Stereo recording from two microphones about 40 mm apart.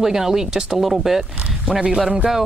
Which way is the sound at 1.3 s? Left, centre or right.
Right.